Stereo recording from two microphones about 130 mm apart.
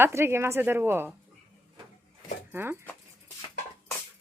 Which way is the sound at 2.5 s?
15° right (ahead or behind).